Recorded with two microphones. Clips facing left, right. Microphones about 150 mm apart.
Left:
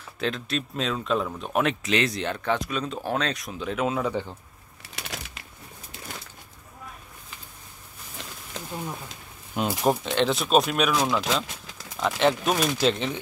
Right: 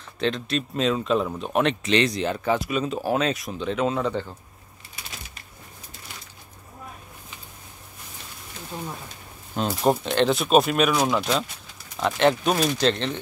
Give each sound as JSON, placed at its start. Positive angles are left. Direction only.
{"t": 0.2, "sound": "speech", "side_deg": 0}
{"t": 4.9, "sound": "typewriter", "side_deg": 75}
{"t": 9.6, "sound": "speech", "side_deg": 5}
{"t": 11.4, "sound": "a sound", "side_deg": 90}
{"t": 12.0, "sound": "speech", "side_deg": 0}